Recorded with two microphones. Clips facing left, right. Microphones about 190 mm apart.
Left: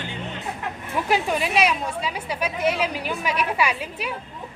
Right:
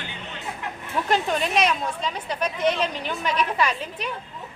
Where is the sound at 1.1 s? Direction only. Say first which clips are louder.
Left 1 dB; 10° left (ahead or behind).